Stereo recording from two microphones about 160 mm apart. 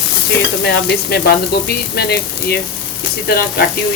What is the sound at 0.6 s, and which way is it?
Speech, 85° left.